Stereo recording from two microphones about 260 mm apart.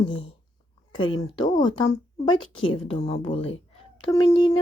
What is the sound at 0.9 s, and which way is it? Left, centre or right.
A woman's voice, centre.